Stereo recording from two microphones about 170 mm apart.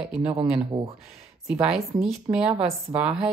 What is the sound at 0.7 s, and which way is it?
Speech, 30° right (ahead or behind).